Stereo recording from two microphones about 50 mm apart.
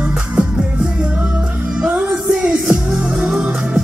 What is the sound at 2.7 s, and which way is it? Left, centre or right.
Music, centre.